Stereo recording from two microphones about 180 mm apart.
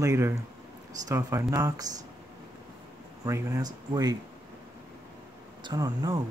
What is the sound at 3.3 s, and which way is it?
Speech, 15° right (ahead or behind).